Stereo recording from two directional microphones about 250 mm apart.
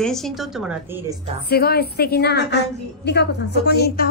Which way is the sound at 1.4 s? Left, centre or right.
Left.